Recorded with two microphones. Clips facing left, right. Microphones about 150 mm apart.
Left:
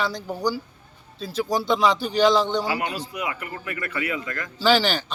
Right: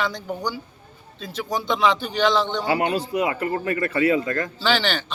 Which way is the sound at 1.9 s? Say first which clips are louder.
Left 2 dB; 35° left (ahead or behind).